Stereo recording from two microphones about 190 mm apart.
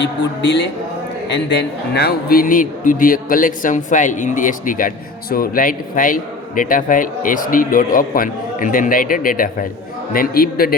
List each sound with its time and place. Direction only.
0.0 s a man's voice: 70° left (ahead or behind); by 10.8 s 50° left (ahead or behind)